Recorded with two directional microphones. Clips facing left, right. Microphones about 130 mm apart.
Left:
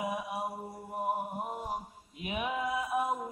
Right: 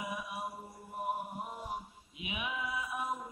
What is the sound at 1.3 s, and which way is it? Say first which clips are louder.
Mantra: left 4 dB; 45° left (ahead or behind).